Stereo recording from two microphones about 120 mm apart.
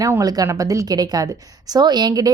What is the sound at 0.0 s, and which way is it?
A woman's voice, 30° right (ahead or behind).